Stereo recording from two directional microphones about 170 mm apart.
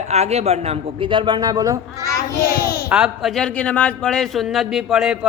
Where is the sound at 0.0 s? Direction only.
40° right (ahead or behind); by 2.0 s 20° right (ahead or behind).